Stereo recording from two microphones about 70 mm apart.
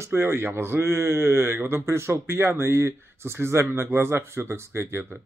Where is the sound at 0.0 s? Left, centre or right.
Right.